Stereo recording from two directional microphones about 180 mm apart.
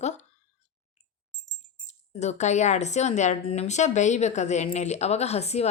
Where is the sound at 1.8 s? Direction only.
40° left (ahead or behind).